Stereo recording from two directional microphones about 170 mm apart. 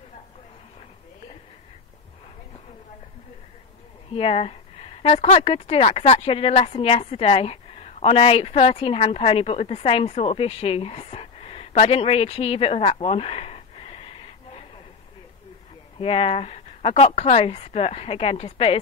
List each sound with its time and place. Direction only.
4.1 s a woman's voice: 35° left (ahead or behind)
16.0 s speech: 35° left (ahead or behind)